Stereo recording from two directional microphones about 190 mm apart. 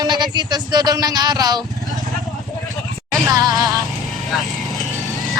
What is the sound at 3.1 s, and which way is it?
Music, 20° right (ahead or behind).